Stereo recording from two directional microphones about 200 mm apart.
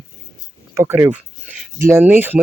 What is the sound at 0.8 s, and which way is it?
Speech, 10° right (ahead or behind).